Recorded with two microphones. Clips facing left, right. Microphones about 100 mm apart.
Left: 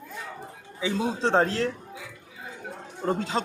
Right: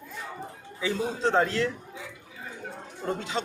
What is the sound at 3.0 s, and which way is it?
Speech, 35° left (ahead or behind).